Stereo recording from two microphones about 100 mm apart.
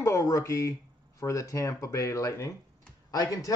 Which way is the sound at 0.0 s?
30° left (ahead or behind).